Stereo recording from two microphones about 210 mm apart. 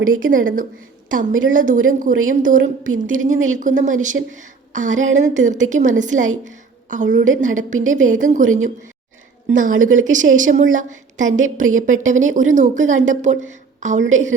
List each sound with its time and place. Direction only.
0.0 s a woman's voice: 40° right (ahead or behind)
9.8 s a woman's voice: 35° right (ahead or behind)